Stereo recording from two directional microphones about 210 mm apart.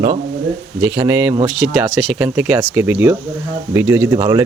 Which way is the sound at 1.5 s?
Centre (ahead or behind).